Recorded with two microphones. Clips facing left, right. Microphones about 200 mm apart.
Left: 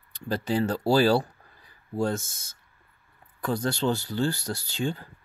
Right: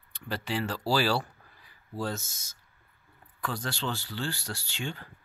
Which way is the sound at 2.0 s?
50° left (ahead or behind).